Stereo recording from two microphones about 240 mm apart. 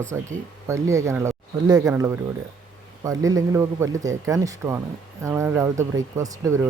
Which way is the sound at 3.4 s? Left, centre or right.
Centre.